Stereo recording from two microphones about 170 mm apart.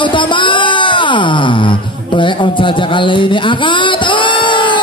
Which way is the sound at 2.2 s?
30° left (ahead or behind).